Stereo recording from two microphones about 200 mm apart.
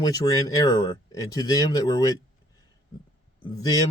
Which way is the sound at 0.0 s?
20° left (ahead or behind).